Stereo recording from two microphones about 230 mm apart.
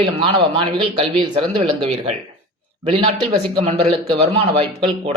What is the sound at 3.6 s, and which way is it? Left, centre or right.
A man's voice, right.